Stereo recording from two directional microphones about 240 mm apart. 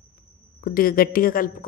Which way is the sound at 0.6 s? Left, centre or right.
Left.